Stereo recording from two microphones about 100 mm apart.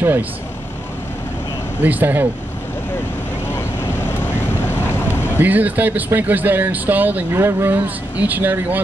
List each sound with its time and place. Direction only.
1.8 s speech: 15° right (ahead or behind)
3.5 s boat: 20° left (ahead or behind)
5.4 s speech: 15° right (ahead or behind)